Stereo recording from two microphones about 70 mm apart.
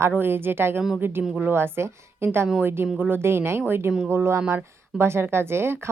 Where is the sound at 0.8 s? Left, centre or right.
Centre.